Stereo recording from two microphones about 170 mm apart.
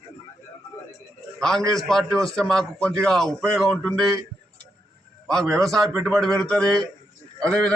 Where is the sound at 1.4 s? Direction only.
5° left (ahead or behind).